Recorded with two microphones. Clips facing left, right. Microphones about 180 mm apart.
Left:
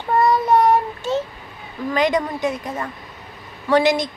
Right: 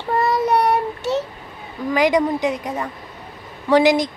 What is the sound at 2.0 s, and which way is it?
Speech, 15° right (ahead or behind).